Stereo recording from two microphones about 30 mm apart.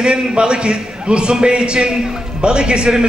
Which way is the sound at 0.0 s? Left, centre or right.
Right.